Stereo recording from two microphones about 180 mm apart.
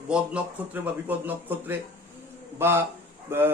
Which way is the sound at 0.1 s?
10° right (ahead or behind).